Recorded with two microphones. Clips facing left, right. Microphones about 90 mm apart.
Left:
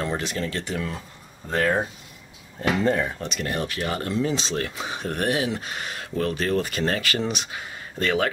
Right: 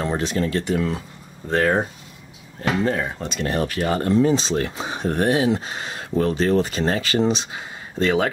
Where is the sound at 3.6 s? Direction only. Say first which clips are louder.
Right 7 dB; 35° right (ahead or behind).